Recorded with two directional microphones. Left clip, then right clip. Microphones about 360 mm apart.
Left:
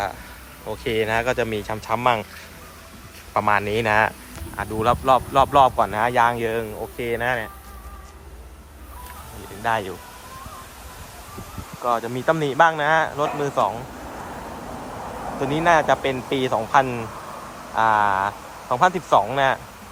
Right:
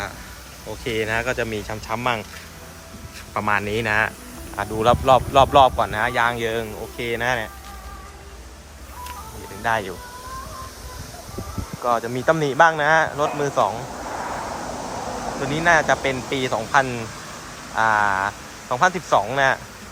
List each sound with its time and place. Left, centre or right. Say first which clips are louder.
0.9 s a man's voice: left 2 dB; centre
3.3 s a man's voice: left 2 dB; centre
9.6 s a man's voice: right 1 dB; centre
11.8 s a man's voice: right 1 dB; centre
15.4 s a man's voice: even; centre